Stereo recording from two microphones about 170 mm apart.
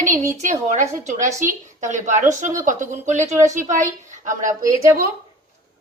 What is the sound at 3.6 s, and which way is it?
Speech, 45° right (ahead or behind).